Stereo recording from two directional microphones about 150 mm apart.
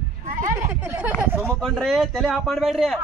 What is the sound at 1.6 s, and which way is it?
A man's voice, centre (ahead or behind).